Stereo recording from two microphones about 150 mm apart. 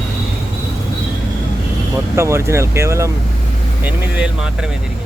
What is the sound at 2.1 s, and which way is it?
Speech, 20° right (ahead or behind).